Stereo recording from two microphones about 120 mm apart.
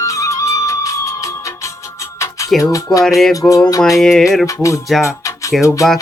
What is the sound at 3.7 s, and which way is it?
Music, 30° left (ahead or behind).